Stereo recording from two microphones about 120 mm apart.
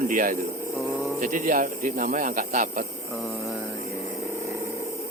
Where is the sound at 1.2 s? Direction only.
90° right.